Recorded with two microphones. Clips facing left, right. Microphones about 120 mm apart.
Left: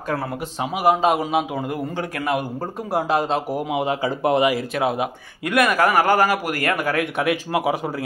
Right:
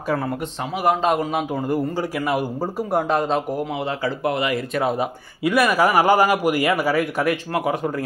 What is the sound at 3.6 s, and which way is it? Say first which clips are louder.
Speech: left 2 dB; 15° left (ahead or behind).